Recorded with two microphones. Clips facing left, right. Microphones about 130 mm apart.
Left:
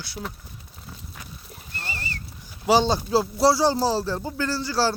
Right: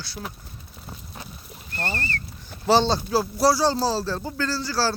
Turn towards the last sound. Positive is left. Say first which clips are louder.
# left 1 dB
turn(degrees=20)  # may be behind; listen again after turning